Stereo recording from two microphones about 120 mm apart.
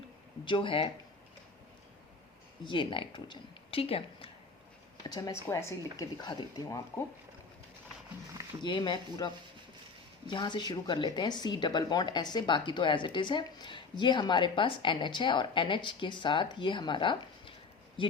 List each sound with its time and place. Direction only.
0.4 s speech: 45° left (ahead or behind)
2.6 s speech: 45° left (ahead or behind)
5.0 s speech: 30° left (ahead or behind)
6.2 s speech: 35° left (ahead or behind)
8.6 s speech: 40° left (ahead or behind)